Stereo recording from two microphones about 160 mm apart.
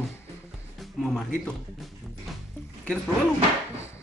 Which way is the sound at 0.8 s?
Centre (ahead or behind).